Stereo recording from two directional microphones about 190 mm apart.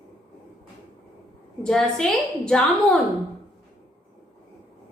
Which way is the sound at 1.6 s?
5° left (ahead or behind).